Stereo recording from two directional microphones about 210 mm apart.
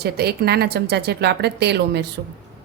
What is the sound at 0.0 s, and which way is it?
A woman's voice, 50° right (ahead or behind).